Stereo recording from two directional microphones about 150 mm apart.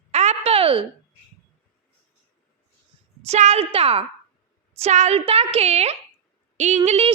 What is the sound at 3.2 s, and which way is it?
Speech, 50° right (ahead or behind).